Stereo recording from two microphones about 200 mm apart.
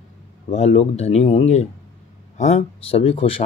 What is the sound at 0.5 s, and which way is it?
Speech, 30° left (ahead or behind).